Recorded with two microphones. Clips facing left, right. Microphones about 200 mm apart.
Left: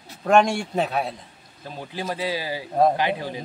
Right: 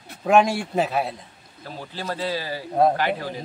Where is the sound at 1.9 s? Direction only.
10° left (ahead or behind).